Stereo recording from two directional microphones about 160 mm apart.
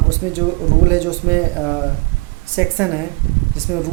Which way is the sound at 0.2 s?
15° right (ahead or behind).